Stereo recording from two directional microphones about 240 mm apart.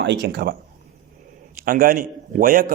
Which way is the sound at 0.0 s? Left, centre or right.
Right.